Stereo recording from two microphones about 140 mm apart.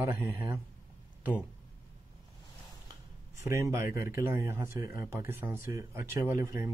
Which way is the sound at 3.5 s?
20° right (ahead or behind).